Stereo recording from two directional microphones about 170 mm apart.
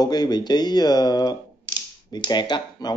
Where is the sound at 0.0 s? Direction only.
25° left (ahead or behind).